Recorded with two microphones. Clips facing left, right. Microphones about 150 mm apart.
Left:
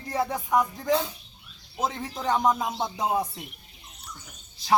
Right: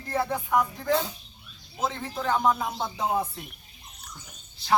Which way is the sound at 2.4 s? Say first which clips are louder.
Left 1 dB; 15° left (ahead or behind).